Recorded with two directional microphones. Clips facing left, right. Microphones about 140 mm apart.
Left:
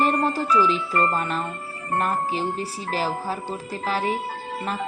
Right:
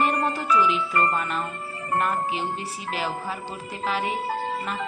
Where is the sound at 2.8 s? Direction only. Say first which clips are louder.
Left 3 dB; 35° left (ahead or behind).